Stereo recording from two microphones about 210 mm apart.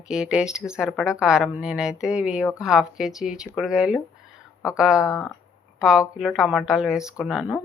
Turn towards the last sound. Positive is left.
turn(degrees=-5)  # may be behind; listen again after turning